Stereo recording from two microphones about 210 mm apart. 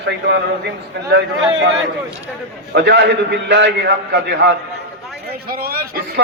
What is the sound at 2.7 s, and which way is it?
A man's voice, 55° right (ahead or behind).